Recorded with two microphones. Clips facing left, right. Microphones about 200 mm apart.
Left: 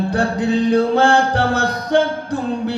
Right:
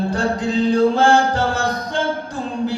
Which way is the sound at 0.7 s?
65° left (ahead or behind).